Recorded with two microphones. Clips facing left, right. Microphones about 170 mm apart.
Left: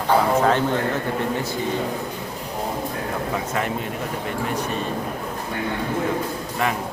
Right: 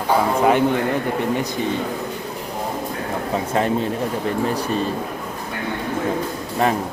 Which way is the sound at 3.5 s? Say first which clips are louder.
Right 9 dB; 30° right (ahead or behind).